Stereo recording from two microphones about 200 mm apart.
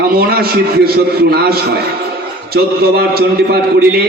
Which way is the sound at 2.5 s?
50° right (ahead or behind).